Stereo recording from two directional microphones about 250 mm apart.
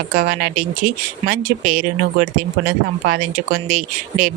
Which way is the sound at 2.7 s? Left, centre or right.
Right.